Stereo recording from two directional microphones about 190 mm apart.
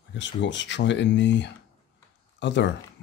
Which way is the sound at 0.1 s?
70° left (ahead or behind).